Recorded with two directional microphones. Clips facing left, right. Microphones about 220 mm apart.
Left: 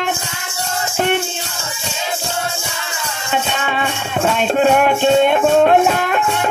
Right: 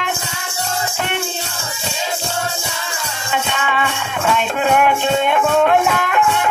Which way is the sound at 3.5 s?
40° left (ahead or behind).